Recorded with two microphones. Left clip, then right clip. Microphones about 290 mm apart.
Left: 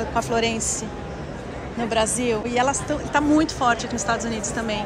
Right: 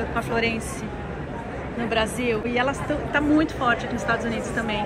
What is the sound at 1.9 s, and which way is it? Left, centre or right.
A woman's voice, centre.